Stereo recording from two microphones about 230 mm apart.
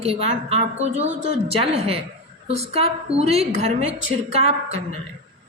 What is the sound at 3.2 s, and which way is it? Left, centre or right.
A woman's voice, right.